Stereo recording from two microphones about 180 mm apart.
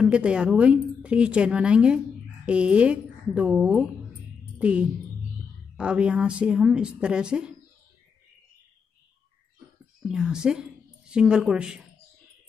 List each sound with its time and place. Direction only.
0.0 s a woman's voice: 5° right (ahead or behind)
10.0 s a woman's voice: 5° right (ahead or behind)